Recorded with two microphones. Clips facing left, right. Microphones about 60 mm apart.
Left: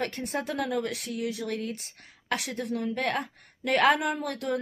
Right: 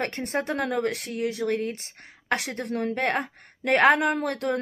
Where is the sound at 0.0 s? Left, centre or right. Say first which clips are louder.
Right 3 dB; right.